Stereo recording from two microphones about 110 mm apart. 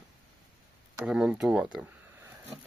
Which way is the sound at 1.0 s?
5° right (ahead or behind).